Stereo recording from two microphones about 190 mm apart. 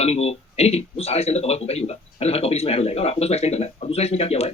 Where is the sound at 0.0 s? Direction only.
35° left (ahead or behind).